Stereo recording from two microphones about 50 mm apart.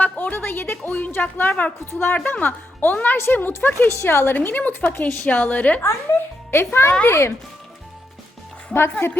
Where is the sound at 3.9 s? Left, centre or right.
Left.